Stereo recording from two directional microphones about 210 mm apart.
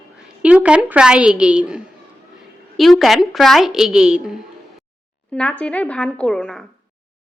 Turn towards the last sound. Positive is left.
turn(degrees=0)  # may be behind; listen again after turning